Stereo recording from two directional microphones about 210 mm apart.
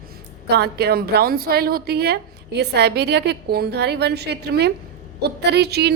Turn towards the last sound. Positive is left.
turn(degrees=-50)  # may be behind; listen again after turning